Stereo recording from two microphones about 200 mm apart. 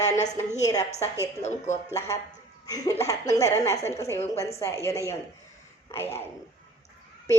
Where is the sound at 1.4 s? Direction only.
35° left (ahead or behind).